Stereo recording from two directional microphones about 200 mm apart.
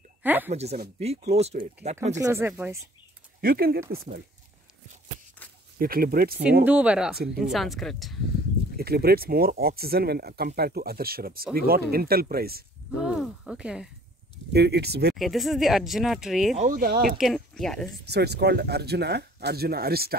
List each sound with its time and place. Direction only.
0.2 s a woman's voice: 10° right (ahead or behind)
0.5 s speech: 30° right (ahead or behind)
2.1 s speech: 15° right (ahead or behind)
3.3 s speech: 50° right (ahead or behind)
5.8 s speech: 45° right (ahead or behind)
6.6 s speech: 5° right (ahead or behind)
8.7 s speech: 50° right (ahead or behind)
13.0 s speech: centre (ahead or behind)
14.5 s speech: 55° right (ahead or behind)
15.1 s speech: centre (ahead or behind)
16.5 s speech: 40° right (ahead or behind)
17.2 s speech: centre (ahead or behind)
18.0 s speech: 55° right (ahead or behind)